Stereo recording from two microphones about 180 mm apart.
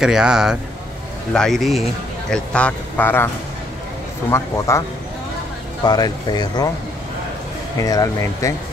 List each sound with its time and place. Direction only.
0.0 s a man's voice: 5° right (ahead or behind)
4.3 s a man's voice: 15° left (ahead or behind)
5.9 s speech: 25° left (ahead or behind)
7.8 s speech: 20° left (ahead or behind)